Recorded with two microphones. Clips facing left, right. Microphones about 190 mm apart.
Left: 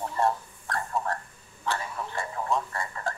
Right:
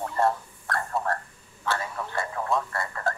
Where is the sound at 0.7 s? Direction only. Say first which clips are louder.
Right 2 dB; 55° right (ahead or behind).